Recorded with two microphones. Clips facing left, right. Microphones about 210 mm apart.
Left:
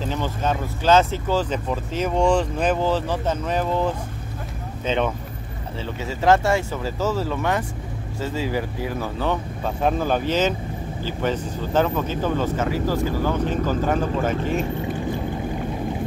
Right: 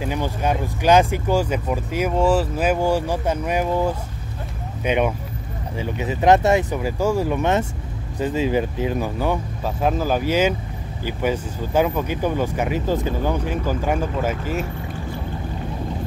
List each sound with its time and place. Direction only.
0.0 s speech: 10° right (ahead or behind)